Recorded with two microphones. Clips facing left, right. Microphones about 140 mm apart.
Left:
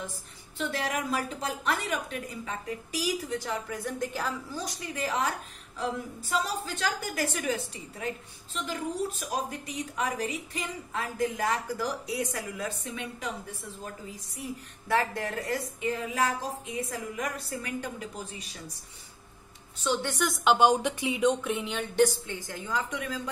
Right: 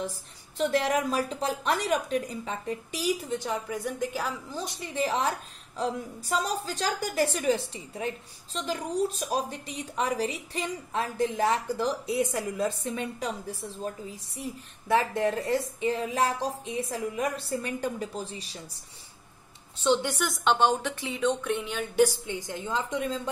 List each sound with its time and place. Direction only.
0.6 s a woman's voice: 40° right (ahead or behind); by 4.4 s 10° right (ahead or behind)
4.5 s a woman's voice: 20° right (ahead or behind)
9.3 s a woman's voice: 30° right (ahead or behind)
12.8 s a woman's voice: 40° right (ahead or behind)
19.8 s a woman's voice: 25° right (ahead or behind)
20.2 s speech: centre (ahead or behind); by 23.2 s 25° right (ahead or behind)